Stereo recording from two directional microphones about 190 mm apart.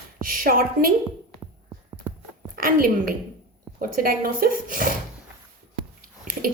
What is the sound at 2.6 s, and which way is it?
A woman's voice, 50° right (ahead or behind).